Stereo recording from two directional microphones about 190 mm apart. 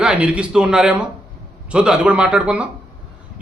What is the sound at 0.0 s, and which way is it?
A man's voice, 5° right (ahead or behind).